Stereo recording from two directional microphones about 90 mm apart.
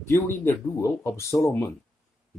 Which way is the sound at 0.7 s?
30° left (ahead or behind).